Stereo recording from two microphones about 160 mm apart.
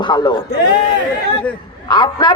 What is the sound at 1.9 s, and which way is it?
Speech, 30° left (ahead or behind).